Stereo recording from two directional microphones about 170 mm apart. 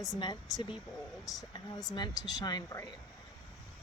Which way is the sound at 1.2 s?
25° left (ahead or behind).